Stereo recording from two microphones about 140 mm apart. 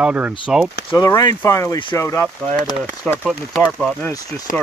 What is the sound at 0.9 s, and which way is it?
Speech, 15° left (ahead or behind).